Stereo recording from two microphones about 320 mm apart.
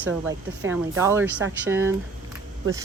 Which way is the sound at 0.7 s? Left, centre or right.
Centre.